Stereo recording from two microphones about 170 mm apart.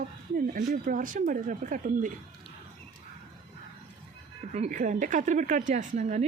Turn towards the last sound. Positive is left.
turn(degrees=-45)  # may be behind; listen again after turning